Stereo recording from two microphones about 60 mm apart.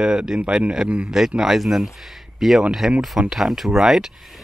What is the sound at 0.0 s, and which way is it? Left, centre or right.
Speech, centre.